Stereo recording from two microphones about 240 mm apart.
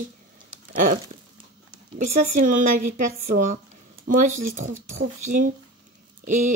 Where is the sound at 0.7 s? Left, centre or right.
Right.